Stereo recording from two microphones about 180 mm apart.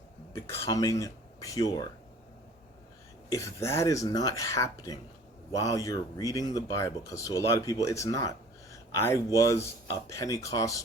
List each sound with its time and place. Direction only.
0.3 s speech: 15° left (ahead or behind)
3.2 s speech: 15° left (ahead or behind)